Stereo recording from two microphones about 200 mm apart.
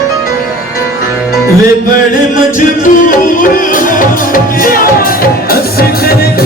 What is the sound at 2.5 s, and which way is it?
Music, 40° left (ahead or behind).